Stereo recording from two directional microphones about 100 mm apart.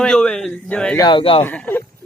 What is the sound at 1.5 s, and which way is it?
Speech, 20° left (ahead or behind).